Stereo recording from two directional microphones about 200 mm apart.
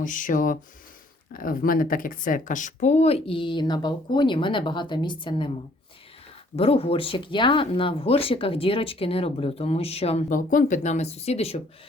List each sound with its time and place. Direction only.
0.0 s speech: 40° left (ahead or behind); by 5.5 s 25° left (ahead or behind)
6.6 s speech: 30° left (ahead or behind)